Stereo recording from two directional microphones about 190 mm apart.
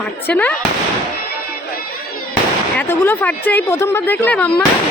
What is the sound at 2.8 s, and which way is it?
A woman's voice, 10° left (ahead or behind).